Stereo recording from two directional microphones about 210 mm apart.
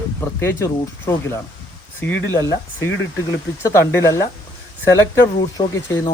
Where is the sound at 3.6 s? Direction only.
10° left (ahead or behind).